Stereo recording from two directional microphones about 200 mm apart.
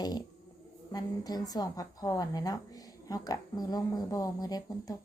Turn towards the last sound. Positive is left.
turn(degrees=20)  # may be behind; listen again after turning